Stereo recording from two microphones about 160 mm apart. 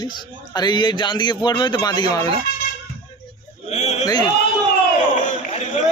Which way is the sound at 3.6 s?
45° left (ahead or behind).